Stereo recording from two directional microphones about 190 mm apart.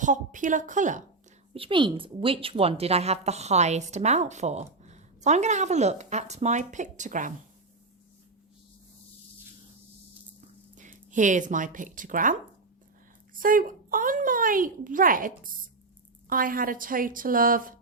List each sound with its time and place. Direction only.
0.0 s a woman's voice: 40° right (ahead or behind)
1.5 s a woman's voice: 25° right (ahead or behind); by 7.3 s 40° right (ahead or behind)
10.8 s a child's voice: 40° right (ahead or behind)